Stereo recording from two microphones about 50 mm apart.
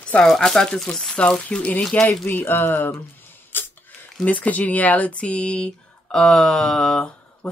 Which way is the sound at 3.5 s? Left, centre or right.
Left.